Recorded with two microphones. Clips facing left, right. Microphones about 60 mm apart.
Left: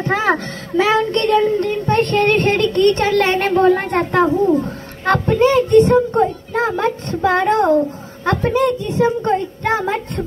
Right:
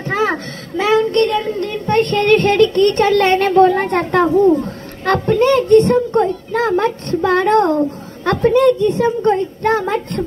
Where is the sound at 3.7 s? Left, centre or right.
Centre.